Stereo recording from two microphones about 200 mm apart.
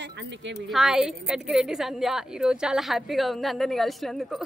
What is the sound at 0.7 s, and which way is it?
A woman's voice, centre (ahead or behind).